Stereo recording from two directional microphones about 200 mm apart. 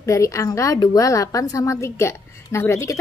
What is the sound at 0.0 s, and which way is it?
A woman's voice, 15° left (ahead or behind).